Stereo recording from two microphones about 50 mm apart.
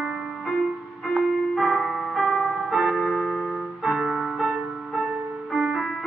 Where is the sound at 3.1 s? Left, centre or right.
Centre.